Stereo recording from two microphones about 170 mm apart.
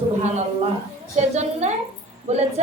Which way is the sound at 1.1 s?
40° right (ahead or behind).